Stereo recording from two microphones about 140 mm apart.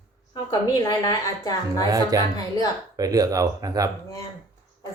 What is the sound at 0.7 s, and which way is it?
A woman's voice, 30° left (ahead or behind).